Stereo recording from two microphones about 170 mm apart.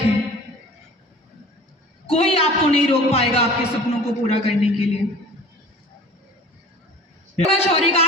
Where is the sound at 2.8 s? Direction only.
35° left (ahead or behind).